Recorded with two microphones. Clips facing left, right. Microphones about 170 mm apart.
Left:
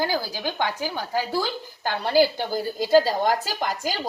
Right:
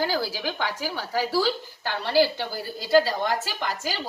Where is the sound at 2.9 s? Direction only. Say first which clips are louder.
Left 2 dB; 40° left (ahead or behind).